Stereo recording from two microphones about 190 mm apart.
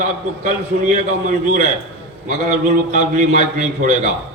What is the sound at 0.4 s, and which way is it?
A man's voice, 40° right (ahead or behind).